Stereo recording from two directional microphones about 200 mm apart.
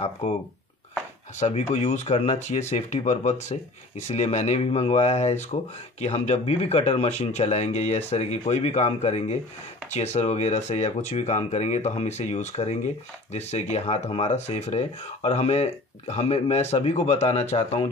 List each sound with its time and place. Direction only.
1.4 s speech: 30° left (ahead or behind)